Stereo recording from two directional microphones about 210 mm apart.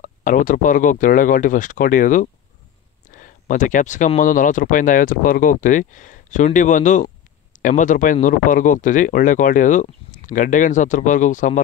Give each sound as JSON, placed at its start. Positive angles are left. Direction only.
{"t": 0.0, "sound": "speech", "side_deg": 40}